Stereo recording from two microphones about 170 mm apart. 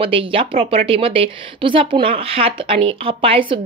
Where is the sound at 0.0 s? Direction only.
30° right (ahead or behind).